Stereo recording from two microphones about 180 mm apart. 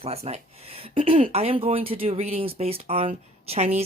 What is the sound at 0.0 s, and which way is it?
Speech, 35° right (ahead or behind).